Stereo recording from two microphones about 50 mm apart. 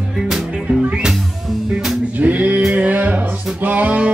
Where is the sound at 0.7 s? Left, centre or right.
Right.